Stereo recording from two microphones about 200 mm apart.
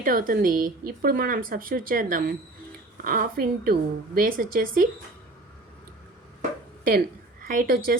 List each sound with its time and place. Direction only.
0.0 s speech: 45° right (ahead or behind)
7.4 s speech: 45° right (ahead or behind)